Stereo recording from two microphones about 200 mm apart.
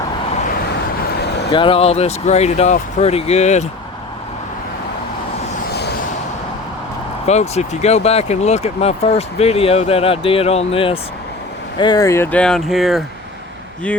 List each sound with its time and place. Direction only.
1.1 s vehicle: 55° left (ahead or behind)
1.5 s speech: 25° left (ahead or behind)
7.3 s speech: 35° left (ahead or behind); by 13.1 s centre (ahead or behind)